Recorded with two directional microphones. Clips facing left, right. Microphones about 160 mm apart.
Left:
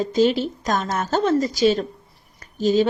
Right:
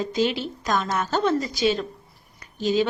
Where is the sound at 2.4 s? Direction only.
45° left (ahead or behind).